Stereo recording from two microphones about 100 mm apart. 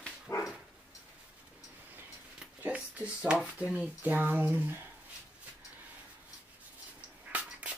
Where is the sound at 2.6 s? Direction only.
10° right (ahead or behind).